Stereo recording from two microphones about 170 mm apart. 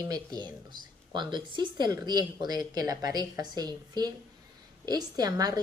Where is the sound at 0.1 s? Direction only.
25° right (ahead or behind).